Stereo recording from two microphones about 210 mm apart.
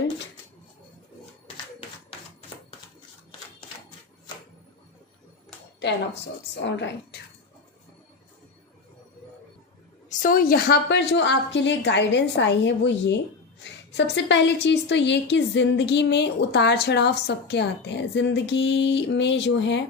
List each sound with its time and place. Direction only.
6.6 s a woman's voice: 55° left (ahead or behind)
10.1 s a woman's voice: 40° left (ahead or behind); by 19.8 s 55° left (ahead or behind)